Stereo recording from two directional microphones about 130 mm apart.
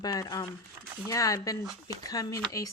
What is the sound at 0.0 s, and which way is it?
A woman's voice, 30° left (ahead or behind).